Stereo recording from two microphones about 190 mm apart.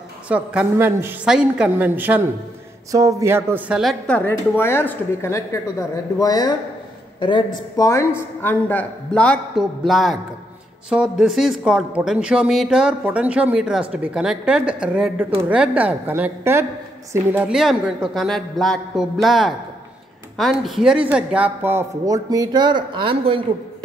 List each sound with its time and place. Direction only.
0.3 s a woman's voice: 5° right (ahead or behind)
4.1 s a woman's voice: 10° left (ahead or behind)
20.6 s speech: centre (ahead or behind); by 23.4 s 25° right (ahead or behind)